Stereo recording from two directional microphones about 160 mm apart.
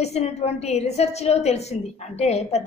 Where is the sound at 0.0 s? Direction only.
45° left (ahead or behind).